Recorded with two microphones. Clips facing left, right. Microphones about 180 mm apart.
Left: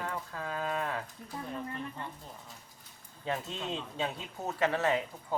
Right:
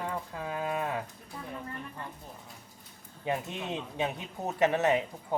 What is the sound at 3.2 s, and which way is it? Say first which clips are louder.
Speech: right 2 dB; 15° right (ahead or behind).